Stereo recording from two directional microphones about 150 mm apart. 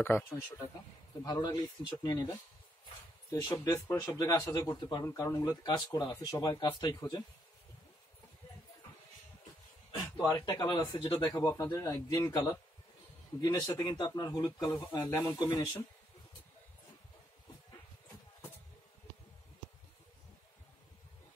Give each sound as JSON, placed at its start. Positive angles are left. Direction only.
{"t": 0.0, "sound": "speech", "side_deg": 15}
{"t": 1.2, "sound": "speech", "side_deg": 25}
{"t": 10.1, "sound": "speech", "side_deg": 25}
{"t": 11.4, "sound": "speech", "side_deg": 15}
{"t": 11.7, "sound": "speech", "side_deg": 25}